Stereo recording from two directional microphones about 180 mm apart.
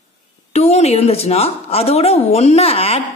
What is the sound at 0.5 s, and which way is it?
A woman's voice, 35° left (ahead or behind).